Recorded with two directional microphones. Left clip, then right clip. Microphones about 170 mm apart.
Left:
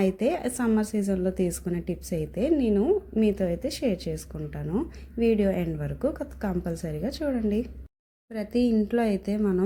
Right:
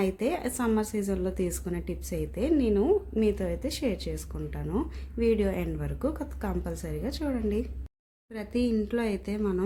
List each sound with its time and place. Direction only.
0.0 s a woman's voice: 15° left (ahead or behind)